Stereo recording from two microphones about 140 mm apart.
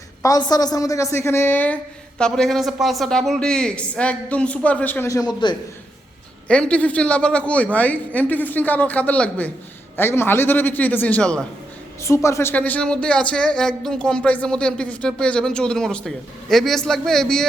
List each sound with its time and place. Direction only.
0.2 s a woman's voice: 30° left (ahead or behind)
6.5 s a woman's voice: 10° left (ahead or behind)
12.0 s a woman's voice: 20° left (ahead or behind); by 17.4 s 5° left (ahead or behind)